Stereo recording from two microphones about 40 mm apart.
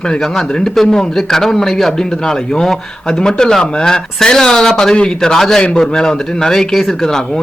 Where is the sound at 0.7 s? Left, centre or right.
Centre.